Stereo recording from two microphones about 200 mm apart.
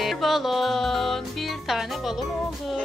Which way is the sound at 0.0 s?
Centre (ahead or behind).